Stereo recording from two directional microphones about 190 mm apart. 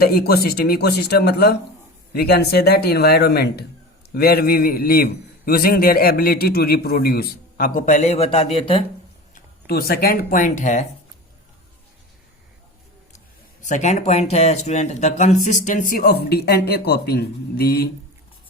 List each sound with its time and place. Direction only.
0.0 s a man's voice: 55° left (ahead or behind); by 8.8 s 30° left (ahead or behind)
9.3 s speech: 55° left (ahead or behind)
13.6 s speech: 40° left (ahead or behind); by 17.8 s 55° left (ahead or behind)